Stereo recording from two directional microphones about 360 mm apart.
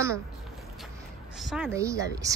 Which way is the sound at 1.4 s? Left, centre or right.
Centre.